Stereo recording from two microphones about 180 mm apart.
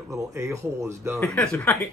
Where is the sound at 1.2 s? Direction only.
5° left (ahead or behind).